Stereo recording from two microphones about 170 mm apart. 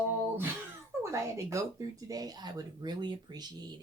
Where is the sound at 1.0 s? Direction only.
15° right (ahead or behind).